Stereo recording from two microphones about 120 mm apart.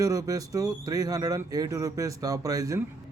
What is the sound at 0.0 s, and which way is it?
Speech, 30° right (ahead or behind).